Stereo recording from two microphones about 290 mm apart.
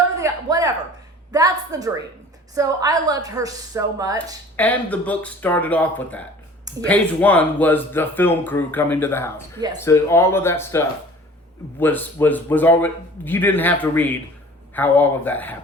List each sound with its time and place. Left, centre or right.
0.2 s a sound: centre
2.6 s a woman's voice: centre
4.5 s speech: centre